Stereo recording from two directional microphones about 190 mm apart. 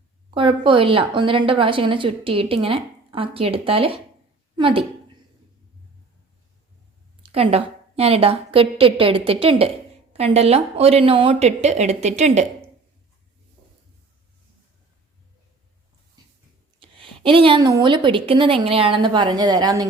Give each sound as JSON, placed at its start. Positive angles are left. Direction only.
{"t": 0.3, "sound": "a woman's voice", "side_deg": -25}
{"t": 7.2, "sound": "a sound", "side_deg": -30}
{"t": 7.9, "sound": "a woman's voice", "side_deg": -30}
{"t": 16.8, "sound": "a woman's voice", "side_deg": -25}